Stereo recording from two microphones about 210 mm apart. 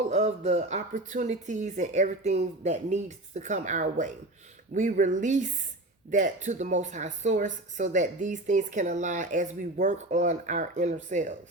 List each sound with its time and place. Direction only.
0.1 s speech: 30° right (ahead or behind)